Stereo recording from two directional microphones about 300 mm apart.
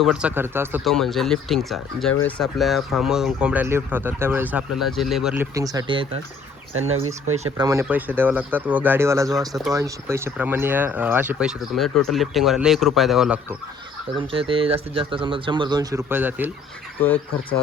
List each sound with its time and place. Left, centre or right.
0.0 s speech: centre
7.5 s speech: centre
14.2 s speech: centre